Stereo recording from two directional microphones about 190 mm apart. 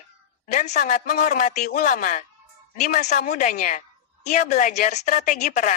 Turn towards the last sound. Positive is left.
turn(degrees=40)  # may be behind; listen again after turning